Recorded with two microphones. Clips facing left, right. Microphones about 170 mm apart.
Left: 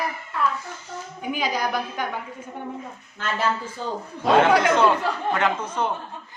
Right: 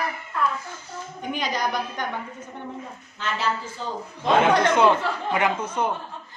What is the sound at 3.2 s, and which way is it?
Speech, 50° left (ahead or behind).